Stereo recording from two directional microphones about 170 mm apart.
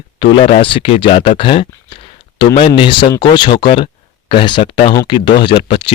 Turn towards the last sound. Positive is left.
turn(degrees=30)  # may be behind; listen again after turning